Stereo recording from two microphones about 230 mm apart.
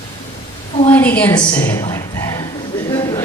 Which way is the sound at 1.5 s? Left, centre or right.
Centre.